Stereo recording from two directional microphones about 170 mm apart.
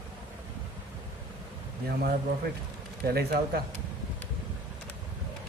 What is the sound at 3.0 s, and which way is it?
Speech, 65° right (ahead or behind).